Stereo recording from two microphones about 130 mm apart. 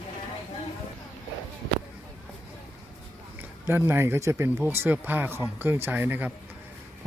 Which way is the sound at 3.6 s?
15° right (ahead or behind).